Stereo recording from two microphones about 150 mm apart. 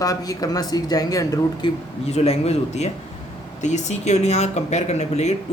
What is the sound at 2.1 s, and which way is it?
Speech, 45° left (ahead or behind).